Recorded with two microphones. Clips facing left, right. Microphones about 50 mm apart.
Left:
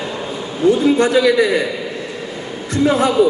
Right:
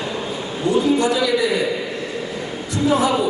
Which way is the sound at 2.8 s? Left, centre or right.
Left.